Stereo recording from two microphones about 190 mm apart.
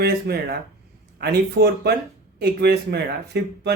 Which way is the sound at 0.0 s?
55° right (ahead or behind).